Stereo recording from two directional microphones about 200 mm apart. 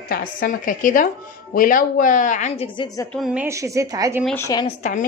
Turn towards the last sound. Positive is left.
turn(degrees=35)  # may be behind; listen again after turning